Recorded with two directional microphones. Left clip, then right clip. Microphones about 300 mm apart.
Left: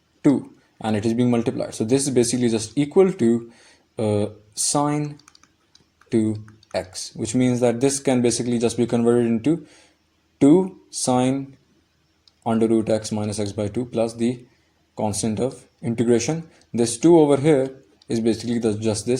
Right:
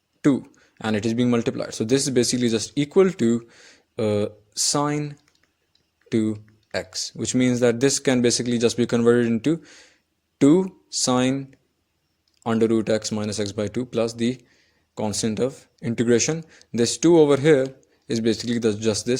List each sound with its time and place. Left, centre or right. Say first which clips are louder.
0.2 s speech: left 2 dB; right